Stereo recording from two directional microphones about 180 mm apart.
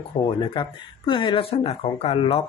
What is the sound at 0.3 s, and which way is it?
Speech, 25° left (ahead or behind).